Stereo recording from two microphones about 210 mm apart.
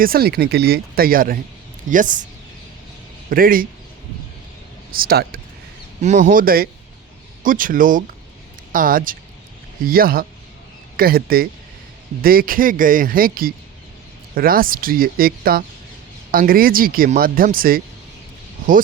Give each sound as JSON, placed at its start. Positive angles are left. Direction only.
{"t": 0.0, "sound": "speech", "side_deg": -45}
{"t": 3.2, "sound": "speech", "side_deg": -40}
{"t": 4.9, "sound": "speech", "side_deg": -45}
{"t": 6.0, "sound": "speech", "side_deg": -35}